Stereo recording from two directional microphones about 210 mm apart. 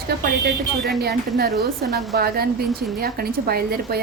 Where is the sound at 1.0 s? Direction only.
50° right (ahead or behind).